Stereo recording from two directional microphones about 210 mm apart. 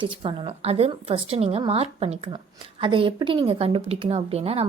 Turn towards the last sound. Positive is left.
turn(degrees=-30)  # may be behind; listen again after turning